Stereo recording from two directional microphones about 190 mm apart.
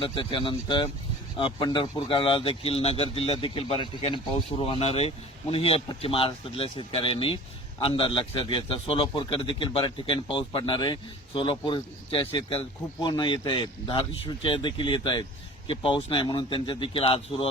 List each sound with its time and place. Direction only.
0.0 s speech: 25° left (ahead or behind)